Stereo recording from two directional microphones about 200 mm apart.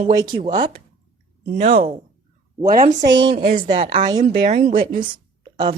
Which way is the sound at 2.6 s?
45° right (ahead or behind).